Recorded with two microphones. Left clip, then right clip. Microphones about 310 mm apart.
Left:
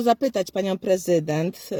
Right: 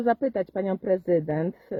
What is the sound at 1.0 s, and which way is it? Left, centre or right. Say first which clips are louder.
Speech: left 2 dB; centre.